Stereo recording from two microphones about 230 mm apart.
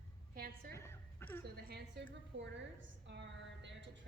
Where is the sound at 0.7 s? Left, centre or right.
Centre.